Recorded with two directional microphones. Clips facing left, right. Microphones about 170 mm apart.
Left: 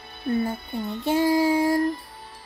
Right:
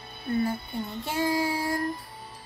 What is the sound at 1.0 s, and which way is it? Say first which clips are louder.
Child singing: left 7 dB; 25° left (ahead or behind).